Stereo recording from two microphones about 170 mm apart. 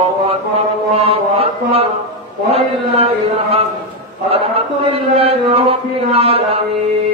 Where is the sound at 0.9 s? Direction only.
35° right (ahead or behind).